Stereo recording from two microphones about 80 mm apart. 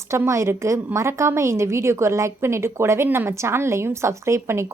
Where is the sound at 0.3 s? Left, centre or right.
Right.